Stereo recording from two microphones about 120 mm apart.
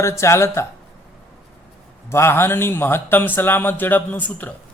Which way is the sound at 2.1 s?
20° left (ahead or behind).